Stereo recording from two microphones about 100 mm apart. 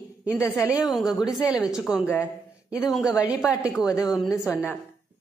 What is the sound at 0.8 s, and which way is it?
A woman's voice, centre (ahead or behind).